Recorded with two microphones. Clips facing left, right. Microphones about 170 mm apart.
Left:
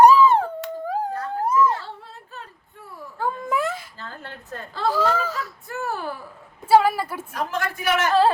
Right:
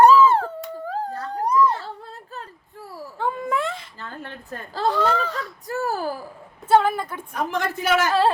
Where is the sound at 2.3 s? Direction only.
35° right (ahead or behind).